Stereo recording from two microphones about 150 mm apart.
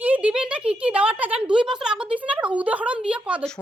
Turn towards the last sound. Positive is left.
turn(degrees=-10)  # may be behind; listen again after turning